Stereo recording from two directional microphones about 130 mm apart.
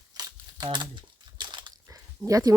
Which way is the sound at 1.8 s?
25° right (ahead or behind).